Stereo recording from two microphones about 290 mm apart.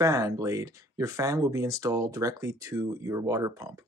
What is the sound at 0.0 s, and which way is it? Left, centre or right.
Speech, centre.